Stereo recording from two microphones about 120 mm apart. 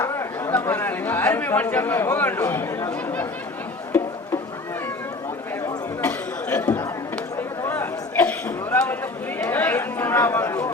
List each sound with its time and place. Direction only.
0.0 s speech: 20° left (ahead or behind)
6.0 s chatter: 10° left (ahead or behind)
7.3 s a sound: 20° left (ahead or behind)
9.4 s chatter: 15° left (ahead or behind)